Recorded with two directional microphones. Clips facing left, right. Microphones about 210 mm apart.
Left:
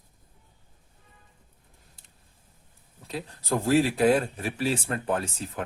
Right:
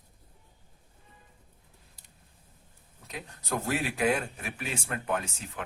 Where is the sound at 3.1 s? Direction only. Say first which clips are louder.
Left 6 dB; 30° left (ahead or behind).